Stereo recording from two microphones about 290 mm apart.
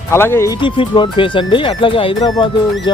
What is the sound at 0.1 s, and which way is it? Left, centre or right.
Speech, centre.